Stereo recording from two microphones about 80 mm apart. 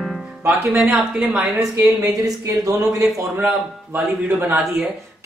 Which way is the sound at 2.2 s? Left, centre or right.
Right.